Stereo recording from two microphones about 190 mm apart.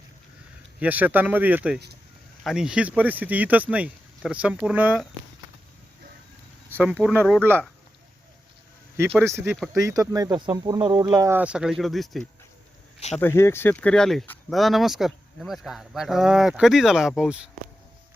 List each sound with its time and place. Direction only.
0.8 s speech: 10° right (ahead or behind)
6.7 s speech: 10° right (ahead or behind)
9.1 s speech: 10° right (ahead or behind)
13.1 s speech: 10° left (ahead or behind); by 17.5 s 5° right (ahead or behind)